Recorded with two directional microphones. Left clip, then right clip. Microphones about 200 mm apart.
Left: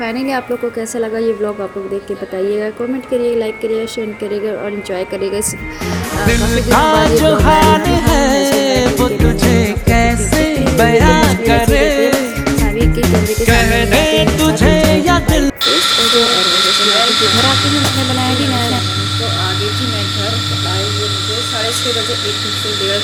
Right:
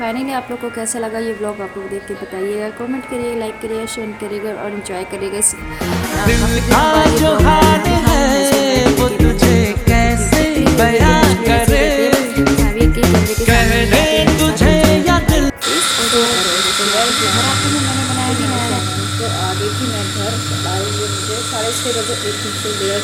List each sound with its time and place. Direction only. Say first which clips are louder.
6.2 s music: left 2 dB; centre (ahead or behind)